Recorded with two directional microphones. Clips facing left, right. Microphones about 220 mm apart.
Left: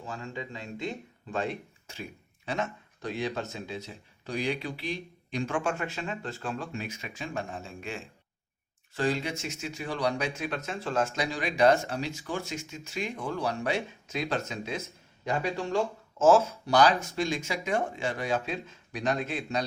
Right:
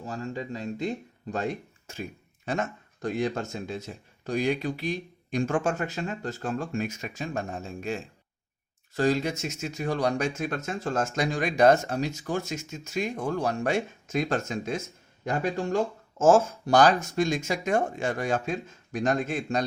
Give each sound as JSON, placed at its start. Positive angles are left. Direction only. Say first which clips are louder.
{"t": 0.0, "sound": "speech", "louder": "right 4 dB", "side_deg": -40}